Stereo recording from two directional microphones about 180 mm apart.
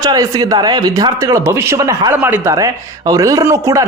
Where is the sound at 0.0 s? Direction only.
20° right (ahead or behind).